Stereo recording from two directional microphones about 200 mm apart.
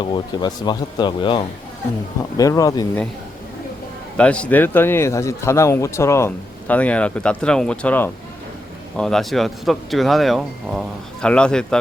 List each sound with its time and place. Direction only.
0.0 s speech: 20° left (ahead or behind)
4.2 s speech: 5° left (ahead or behind)